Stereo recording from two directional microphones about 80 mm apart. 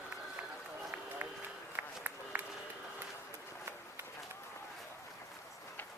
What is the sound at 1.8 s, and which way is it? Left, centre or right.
Run, right.